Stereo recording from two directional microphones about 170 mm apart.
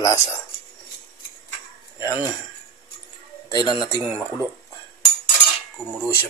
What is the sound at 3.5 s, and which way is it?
Speech, 25° left (ahead or behind).